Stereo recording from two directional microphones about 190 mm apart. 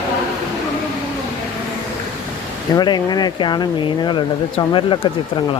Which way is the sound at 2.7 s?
20° left (ahead or behind).